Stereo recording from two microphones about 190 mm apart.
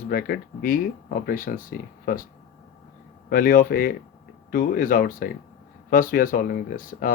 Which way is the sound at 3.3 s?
50° left (ahead or behind).